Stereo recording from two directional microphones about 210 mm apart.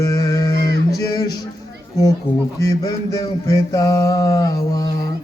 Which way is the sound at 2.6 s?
15° left (ahead or behind).